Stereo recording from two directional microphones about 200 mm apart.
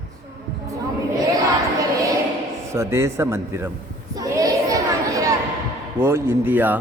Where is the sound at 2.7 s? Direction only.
15° right (ahead or behind).